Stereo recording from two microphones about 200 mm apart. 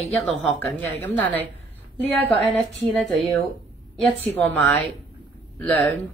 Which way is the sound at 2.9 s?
Centre (ahead or behind).